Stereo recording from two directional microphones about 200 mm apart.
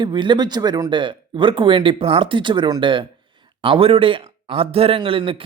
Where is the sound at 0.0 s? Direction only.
25° right (ahead or behind).